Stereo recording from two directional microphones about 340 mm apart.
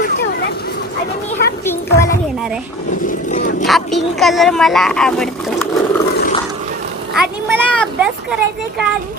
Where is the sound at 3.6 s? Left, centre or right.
Centre.